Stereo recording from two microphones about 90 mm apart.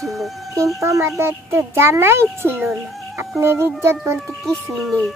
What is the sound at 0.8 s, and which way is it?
A child's voice, 30° right (ahead or behind).